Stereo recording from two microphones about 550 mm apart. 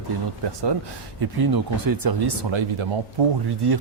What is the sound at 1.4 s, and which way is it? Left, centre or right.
Speech, right.